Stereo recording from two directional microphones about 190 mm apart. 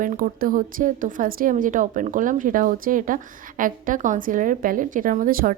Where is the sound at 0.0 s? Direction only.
45° right (ahead or behind).